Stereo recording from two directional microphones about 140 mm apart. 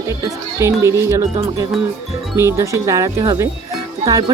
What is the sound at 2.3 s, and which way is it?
Speech, 20° right (ahead or behind).